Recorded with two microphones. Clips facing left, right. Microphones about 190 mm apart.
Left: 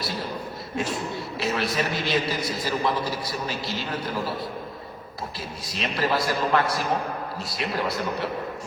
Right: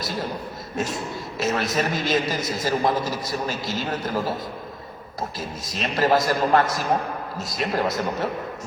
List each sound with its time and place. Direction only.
0.8 s a man's voice: 45° right (ahead or behind)